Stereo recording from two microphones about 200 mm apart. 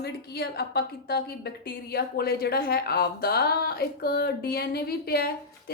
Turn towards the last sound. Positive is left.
turn(degrees=50)  # may be behind; listen again after turning